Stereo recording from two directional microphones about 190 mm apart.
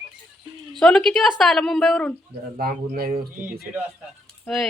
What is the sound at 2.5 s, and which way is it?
Speech, 50° right (ahead or behind).